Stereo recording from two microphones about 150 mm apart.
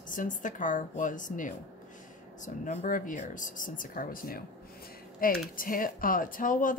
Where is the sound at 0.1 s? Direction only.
60° left (ahead or behind).